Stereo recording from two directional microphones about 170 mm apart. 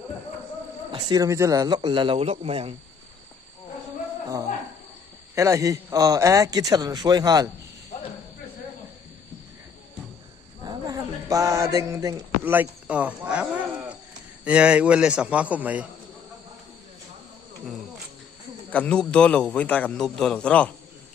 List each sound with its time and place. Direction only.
0.9 s a man's voice: 25° right (ahead or behind)
5.3 s a man's voice: 15° right (ahead or behind)
10.6 s a man's voice: 25° right (ahead or behind)
18.7 s a man's voice: 5° left (ahead or behind)